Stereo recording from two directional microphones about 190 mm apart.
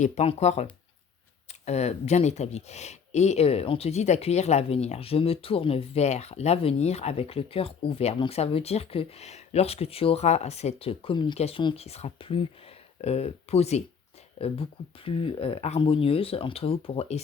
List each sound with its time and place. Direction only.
0.0 s speech: 35° left (ahead or behind)